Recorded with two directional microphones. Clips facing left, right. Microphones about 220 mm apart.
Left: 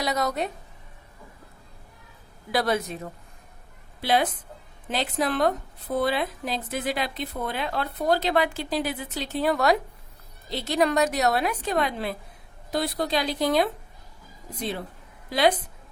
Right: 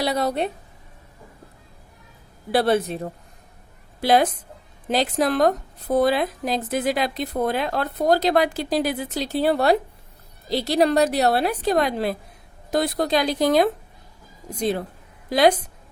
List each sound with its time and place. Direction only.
0.0 s a woman's voice: 30° right (ahead or behind)
2.5 s a woman's voice: 30° right (ahead or behind)
4.0 s a woman's voice: 45° right (ahead or behind)
15.3 s speech: 45° right (ahead or behind)